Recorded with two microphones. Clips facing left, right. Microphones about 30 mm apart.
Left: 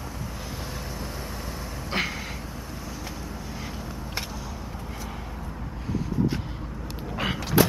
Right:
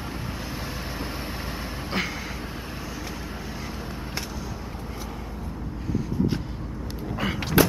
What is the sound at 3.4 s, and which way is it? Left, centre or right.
Vehicle, centre.